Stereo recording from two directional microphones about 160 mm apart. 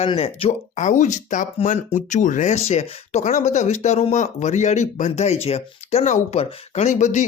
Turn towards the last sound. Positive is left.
turn(degrees=45)  # may be behind; listen again after turning